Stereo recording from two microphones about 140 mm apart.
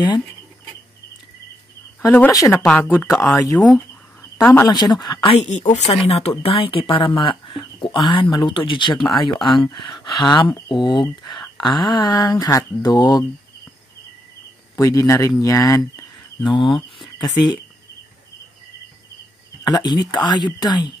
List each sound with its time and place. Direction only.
2.0 s speech: 15° left (ahead or behind)
2.8 s speech: 10° left (ahead or behind)
3.7 s a sound: 15° left (ahead or behind)
4.6 s speech: 30° left (ahead or behind)
5.3 s a woman's voice: 50° left (ahead or behind); by 13.2 s 30° left (ahead or behind)
14.8 s speech: 20° left (ahead or behind)
16.4 s speech: 35° left (ahead or behind)
19.6 s speech: 30° left (ahead or behind)